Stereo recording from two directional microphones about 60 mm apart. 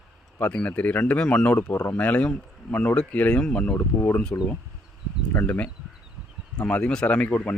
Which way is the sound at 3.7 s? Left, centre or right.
Left.